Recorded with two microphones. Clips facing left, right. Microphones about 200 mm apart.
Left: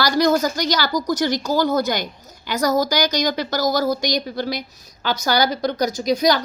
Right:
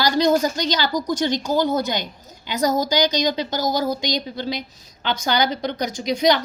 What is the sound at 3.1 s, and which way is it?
Speech, 20° right (ahead or behind).